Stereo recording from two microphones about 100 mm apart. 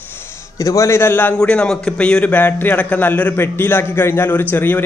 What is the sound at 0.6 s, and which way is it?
Speech, 35° left (ahead or behind).